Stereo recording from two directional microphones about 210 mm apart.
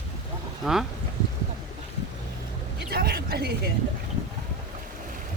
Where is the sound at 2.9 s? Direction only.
50° right (ahead or behind).